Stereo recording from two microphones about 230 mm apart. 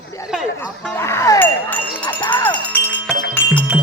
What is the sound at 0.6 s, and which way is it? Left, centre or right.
Speech, centre.